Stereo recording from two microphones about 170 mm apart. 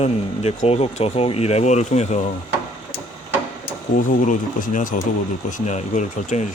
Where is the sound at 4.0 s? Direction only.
50° left (ahead or behind).